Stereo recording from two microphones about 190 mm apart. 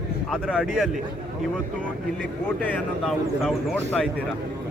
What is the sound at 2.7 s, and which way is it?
Speech, centre (ahead or behind).